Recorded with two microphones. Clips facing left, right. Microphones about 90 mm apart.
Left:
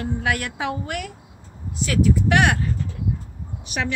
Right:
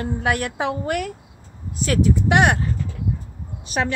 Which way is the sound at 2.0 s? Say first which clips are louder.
Right 1 dB; 25° right (ahead or behind).